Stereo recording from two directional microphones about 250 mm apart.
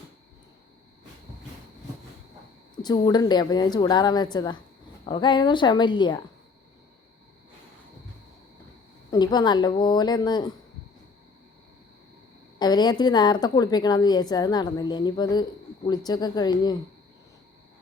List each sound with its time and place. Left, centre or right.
2.8 s a woman's voice: centre
9.0 s a woman's voice: centre
12.5 s a woman's voice: centre